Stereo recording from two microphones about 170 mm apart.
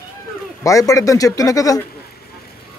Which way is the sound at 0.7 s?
20° left (ahead or behind).